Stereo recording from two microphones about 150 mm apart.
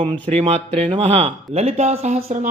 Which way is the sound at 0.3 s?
45° right (ahead or behind).